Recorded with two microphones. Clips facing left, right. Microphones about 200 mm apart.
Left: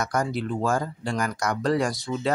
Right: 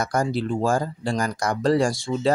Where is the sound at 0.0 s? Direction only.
30° right (ahead or behind).